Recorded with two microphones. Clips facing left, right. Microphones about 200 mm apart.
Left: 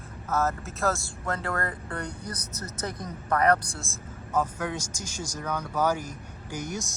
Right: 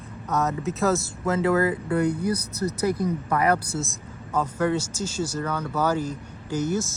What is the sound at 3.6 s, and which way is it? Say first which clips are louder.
A man's voice: right 9 dB; 5° right (ahead or behind).